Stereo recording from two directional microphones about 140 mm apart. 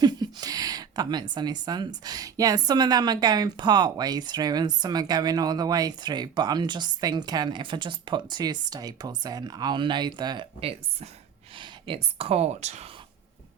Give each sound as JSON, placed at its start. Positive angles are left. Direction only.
{"t": 0.0, "sound": "a woman's voice", "side_deg": -30}
{"t": 11.5, "sound": "a sound", "side_deg": -35}
{"t": 12.1, "sound": "speech", "side_deg": -45}